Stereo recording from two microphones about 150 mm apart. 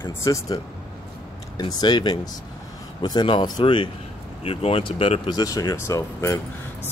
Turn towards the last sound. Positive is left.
turn(degrees=20)  # may be behind; listen again after turning